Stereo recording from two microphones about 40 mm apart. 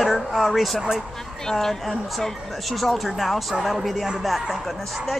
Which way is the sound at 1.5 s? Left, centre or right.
Centre.